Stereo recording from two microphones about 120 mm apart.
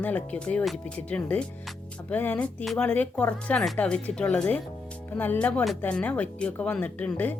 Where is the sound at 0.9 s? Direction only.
10° left (ahead or behind).